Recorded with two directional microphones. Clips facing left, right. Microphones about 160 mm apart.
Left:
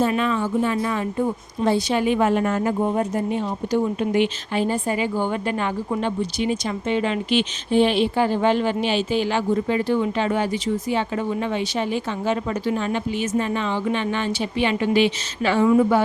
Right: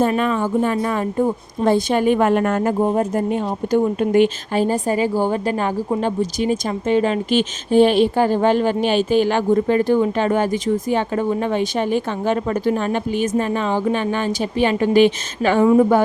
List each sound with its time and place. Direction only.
0.0 s speech: 45° right (ahead or behind)
2.8 s speech: 40° right (ahead or behind)
15.6 s a woman's voice: 35° right (ahead or behind)